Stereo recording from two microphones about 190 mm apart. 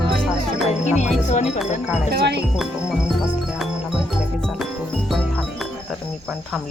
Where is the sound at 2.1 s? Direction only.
60° right (ahead or behind).